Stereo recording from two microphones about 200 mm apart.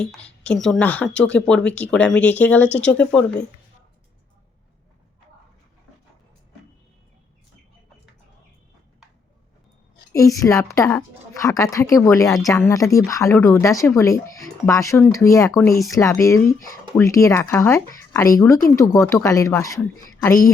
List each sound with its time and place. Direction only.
0.0 s speech: 5° left (ahead or behind)
10.1 s a woman's voice: 15° left (ahead or behind)